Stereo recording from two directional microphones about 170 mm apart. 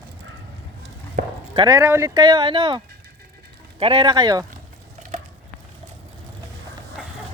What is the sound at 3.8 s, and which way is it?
Speech, 30° right (ahead or behind).